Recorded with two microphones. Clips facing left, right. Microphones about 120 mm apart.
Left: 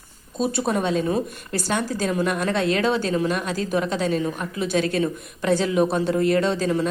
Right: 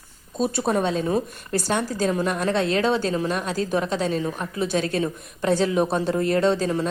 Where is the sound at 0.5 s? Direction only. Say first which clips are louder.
Even; 35° right (ahead or behind).